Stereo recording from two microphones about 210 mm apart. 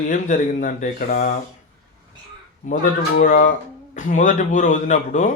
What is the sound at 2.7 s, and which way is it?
Speech, 35° left (ahead or behind).